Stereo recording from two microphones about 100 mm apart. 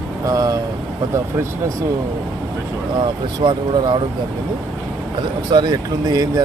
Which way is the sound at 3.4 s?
50° right (ahead or behind).